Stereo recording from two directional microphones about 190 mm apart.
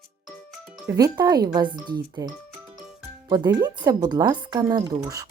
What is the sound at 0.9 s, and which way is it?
Speech, 20° right (ahead or behind).